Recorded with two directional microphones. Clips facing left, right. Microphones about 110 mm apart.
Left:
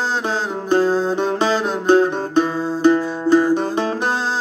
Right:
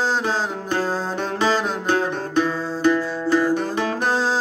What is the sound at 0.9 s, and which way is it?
Music, centre (ahead or behind).